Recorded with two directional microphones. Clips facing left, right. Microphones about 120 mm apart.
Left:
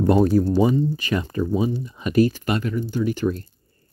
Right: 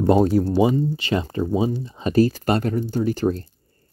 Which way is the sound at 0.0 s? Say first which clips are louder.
Even; 25° right (ahead or behind).